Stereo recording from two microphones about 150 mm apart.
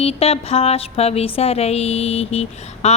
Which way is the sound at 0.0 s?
40° left (ahead or behind).